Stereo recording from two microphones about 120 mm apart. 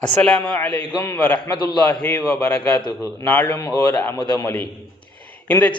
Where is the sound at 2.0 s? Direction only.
5° left (ahead or behind).